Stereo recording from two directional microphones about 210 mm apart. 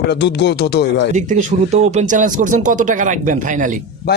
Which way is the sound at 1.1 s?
35° right (ahead or behind).